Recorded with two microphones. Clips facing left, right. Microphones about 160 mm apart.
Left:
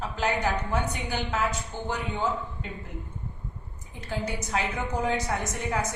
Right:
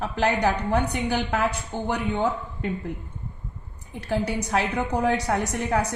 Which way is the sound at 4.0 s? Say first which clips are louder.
Right 6 dB; 65° right (ahead or behind).